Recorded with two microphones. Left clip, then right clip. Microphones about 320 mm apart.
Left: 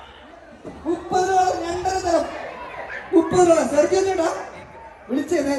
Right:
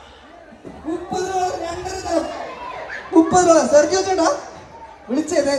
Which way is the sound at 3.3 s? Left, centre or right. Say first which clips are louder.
Right 4 dB; centre.